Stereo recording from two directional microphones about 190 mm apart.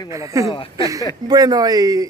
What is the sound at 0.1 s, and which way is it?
Speech, 15° right (ahead or behind).